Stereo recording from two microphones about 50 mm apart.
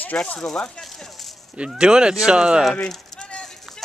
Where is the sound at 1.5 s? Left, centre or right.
Centre.